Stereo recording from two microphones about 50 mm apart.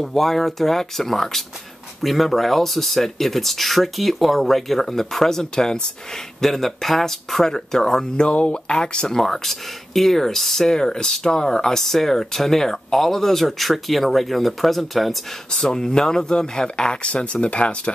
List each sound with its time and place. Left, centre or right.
0.0 s speech: centre
15.5 s speech: centre